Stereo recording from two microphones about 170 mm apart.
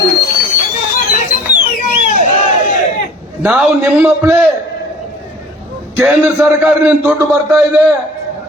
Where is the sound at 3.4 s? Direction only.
5° right (ahead or behind).